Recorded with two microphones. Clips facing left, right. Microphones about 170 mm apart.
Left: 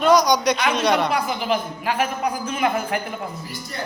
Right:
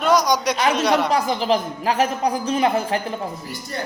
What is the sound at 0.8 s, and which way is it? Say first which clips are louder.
Speech: even; 5° right (ahead or behind).